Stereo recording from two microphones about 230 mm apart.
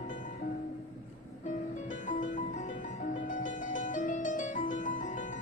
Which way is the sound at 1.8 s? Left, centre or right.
Left.